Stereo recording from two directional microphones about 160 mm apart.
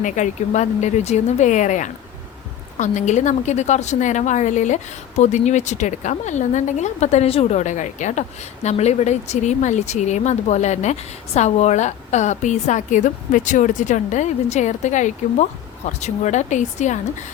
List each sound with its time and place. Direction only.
0.0 s a woman's voice: 50° left (ahead or behind)